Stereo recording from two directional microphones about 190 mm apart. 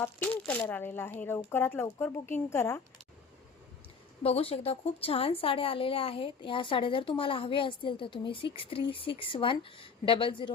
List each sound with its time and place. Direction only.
0.0 s speech: 10° left (ahead or behind)
4.2 s a woman's voice: 30° left (ahead or behind)